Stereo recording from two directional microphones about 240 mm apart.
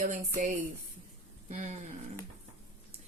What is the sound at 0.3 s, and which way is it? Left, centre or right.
Speech, right.